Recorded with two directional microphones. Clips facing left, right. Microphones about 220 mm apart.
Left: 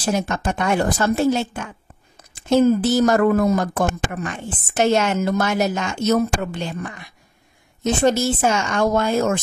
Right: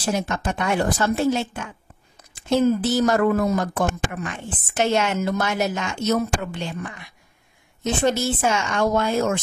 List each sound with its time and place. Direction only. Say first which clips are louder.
0.1 s a woman's voice: left 2 dB; 45° left (ahead or behind)
2.8 s a woman's voice: left 3 dB; 45° left (ahead or behind)